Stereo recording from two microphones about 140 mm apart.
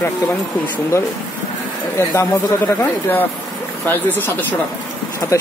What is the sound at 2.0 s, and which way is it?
Speech, 15° left (ahead or behind).